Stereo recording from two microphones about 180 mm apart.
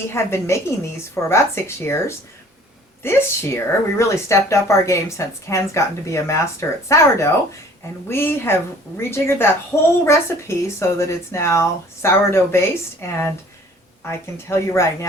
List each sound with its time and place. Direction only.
0.1 s speech: 15° left (ahead or behind)